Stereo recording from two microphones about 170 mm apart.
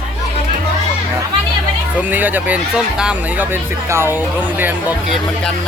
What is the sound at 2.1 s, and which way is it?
Speech, 10° right (ahead or behind).